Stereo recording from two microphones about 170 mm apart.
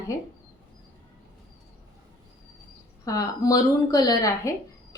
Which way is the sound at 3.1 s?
20° left (ahead or behind).